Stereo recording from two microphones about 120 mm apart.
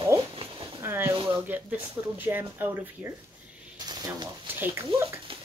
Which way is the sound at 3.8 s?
35° right (ahead or behind).